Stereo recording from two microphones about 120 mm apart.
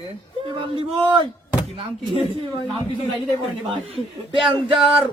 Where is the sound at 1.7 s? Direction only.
50° right (ahead or behind).